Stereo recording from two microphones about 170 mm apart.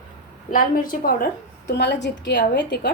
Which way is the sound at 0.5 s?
55° left (ahead or behind).